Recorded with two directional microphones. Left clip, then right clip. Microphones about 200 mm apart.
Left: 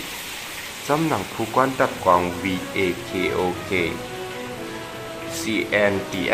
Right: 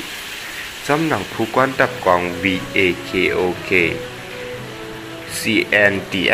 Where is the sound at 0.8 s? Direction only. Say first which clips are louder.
Right 4 dB; 15° right (ahead or behind).